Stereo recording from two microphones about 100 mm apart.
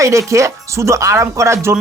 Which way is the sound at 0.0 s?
30° right (ahead or behind).